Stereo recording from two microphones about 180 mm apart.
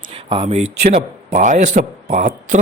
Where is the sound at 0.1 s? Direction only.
30° right (ahead or behind).